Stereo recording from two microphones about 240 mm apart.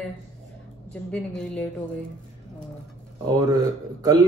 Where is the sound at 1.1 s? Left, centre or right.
Centre.